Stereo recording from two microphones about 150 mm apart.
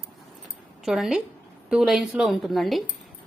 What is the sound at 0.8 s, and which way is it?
A woman's voice, centre (ahead or behind).